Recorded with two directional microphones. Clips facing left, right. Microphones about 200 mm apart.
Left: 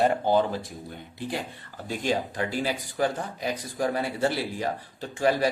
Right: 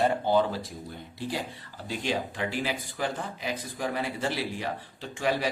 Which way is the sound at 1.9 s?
45° left (ahead or behind).